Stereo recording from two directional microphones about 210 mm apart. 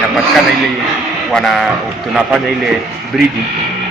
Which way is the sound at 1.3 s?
Centre (ahead or behind).